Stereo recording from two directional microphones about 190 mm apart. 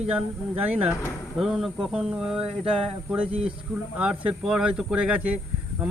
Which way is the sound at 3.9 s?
5° right (ahead or behind).